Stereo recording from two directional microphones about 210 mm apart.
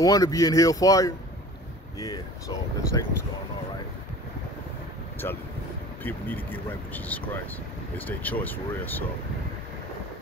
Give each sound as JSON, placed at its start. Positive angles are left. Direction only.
{"t": 0.0, "sound": "speech", "side_deg": 15}
{"t": 5.2, "sound": "speech", "side_deg": 10}